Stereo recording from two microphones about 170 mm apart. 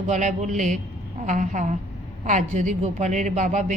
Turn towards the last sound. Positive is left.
turn(degrees=-45)  # may be behind; listen again after turning